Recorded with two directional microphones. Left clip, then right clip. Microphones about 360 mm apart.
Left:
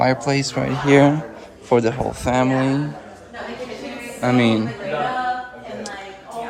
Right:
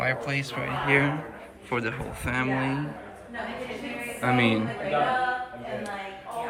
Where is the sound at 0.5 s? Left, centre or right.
Left.